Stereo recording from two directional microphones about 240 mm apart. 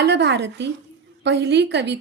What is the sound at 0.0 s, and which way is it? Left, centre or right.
Music, right.